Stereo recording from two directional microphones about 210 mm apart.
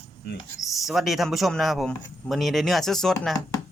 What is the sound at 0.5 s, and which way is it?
Speech, centre (ahead or behind).